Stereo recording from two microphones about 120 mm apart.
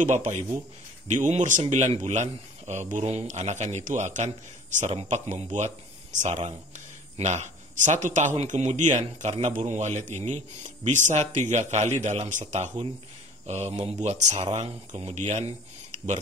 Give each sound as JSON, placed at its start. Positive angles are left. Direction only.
{"t": 0.0, "sound": "a man's voice", "side_deg": -90}
{"t": 8.4, "sound": "a man's voice", "side_deg": -70}
{"t": 13.7, "sound": "speech", "side_deg": -35}
{"t": 14.0, "sound": "a man's voice", "side_deg": -70}